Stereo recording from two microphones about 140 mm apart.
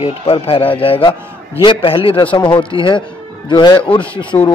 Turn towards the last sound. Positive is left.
turn(degrees=35)  # may be behind; listen again after turning